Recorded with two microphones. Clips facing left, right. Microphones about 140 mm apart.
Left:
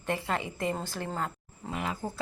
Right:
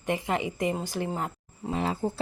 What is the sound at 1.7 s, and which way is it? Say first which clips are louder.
Speech: right 6 dB; 30° right (ahead or behind).